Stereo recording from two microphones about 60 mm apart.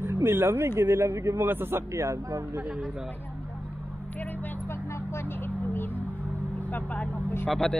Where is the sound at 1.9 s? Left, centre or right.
Right.